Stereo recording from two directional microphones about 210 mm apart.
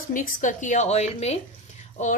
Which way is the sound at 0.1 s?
35° left (ahead or behind).